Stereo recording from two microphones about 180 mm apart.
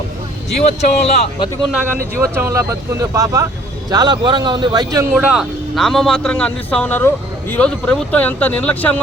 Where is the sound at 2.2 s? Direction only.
15° right (ahead or behind).